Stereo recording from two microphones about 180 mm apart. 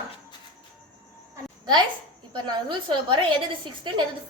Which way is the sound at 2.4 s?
25° right (ahead or behind).